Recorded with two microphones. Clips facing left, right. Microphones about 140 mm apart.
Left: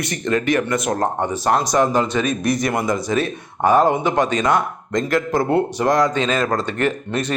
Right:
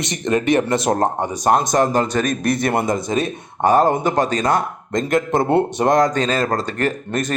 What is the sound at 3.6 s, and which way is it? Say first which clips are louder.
Speech: even; 35° right (ahead or behind).